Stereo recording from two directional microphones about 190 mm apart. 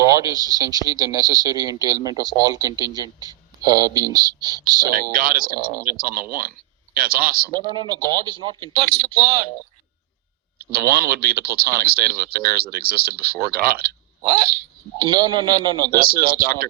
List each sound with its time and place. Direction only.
0.0 s a man's voice: 15° right (ahead or behind)
5.1 s speech: 50° right (ahead or behind)
7.5 s a man's voice: 25° right (ahead or behind)
10.6 s a sound: 55° right (ahead or behind)
10.9 s speech: 55° right (ahead or behind)
14.2 s a sound: 20° right (ahead or behind)
14.9 s a man's voice: 25° right (ahead or behind)
16.0 s speech: 50° right (ahead or behind)